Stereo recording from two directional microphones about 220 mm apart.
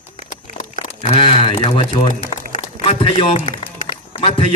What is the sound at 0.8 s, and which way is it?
A man's voice, 25° left (ahead or behind).